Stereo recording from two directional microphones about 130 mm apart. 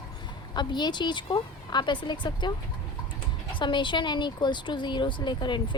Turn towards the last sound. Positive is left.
turn(degrees=35)  # may be behind; listen again after turning